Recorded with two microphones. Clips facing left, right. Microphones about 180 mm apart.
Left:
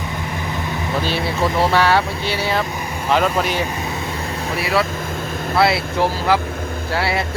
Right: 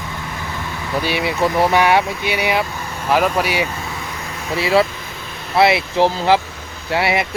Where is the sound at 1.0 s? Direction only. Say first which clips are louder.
Right 3 dB; 15° right (ahead or behind).